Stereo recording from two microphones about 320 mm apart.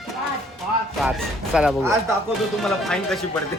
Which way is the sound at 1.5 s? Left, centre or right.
Centre.